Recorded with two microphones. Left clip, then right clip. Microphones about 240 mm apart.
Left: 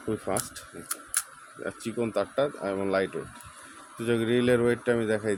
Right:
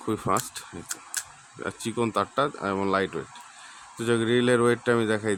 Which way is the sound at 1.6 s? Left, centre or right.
Centre.